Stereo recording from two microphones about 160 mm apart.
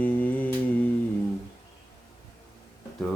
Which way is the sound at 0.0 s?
10° left (ahead or behind).